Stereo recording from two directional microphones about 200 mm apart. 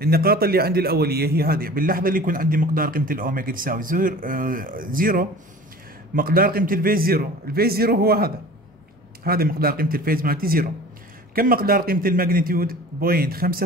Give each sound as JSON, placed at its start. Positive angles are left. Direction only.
{"t": 0.0, "sound": "a man's voice", "side_deg": -50}